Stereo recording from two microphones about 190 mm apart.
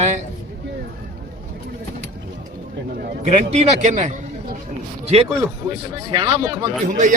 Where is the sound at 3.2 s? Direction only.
35° right (ahead or behind).